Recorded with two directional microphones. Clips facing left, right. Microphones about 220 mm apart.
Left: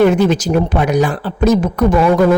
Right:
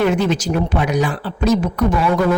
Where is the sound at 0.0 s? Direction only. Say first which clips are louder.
Left 5 dB; 45° left (ahead or behind).